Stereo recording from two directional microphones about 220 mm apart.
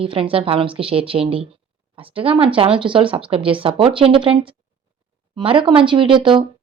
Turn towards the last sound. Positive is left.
turn(degrees=-20)  # may be behind; listen again after turning